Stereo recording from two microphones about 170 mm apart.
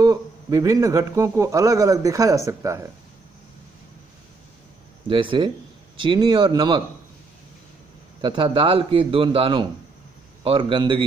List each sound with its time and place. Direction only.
0.0 s a man's voice: 20° right (ahead or behind)
5.0 s a man's voice: 30° right (ahead or behind)
8.2 s a man's voice: 30° right (ahead or behind)